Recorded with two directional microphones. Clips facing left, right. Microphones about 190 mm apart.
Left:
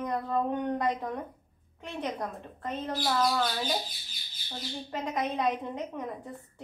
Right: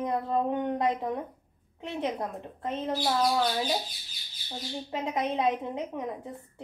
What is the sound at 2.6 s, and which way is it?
Speech, 25° right (ahead or behind).